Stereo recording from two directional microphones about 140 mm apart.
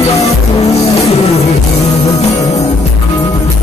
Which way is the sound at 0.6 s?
50° left (ahead or behind).